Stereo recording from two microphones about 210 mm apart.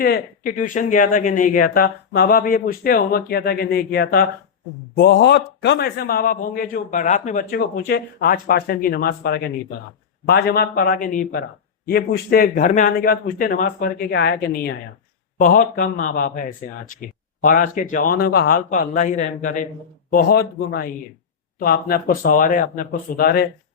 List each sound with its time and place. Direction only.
0.0 s a man's voice: 45° left (ahead or behind)